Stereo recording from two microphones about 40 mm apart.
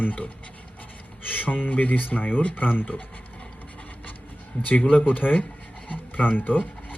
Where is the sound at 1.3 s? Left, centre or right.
Left.